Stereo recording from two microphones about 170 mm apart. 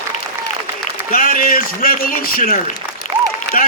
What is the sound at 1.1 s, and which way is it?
A man's voice, 55° left (ahead or behind).